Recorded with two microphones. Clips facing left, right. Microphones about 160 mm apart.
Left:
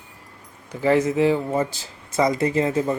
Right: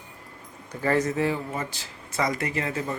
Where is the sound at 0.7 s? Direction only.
10° left (ahead or behind).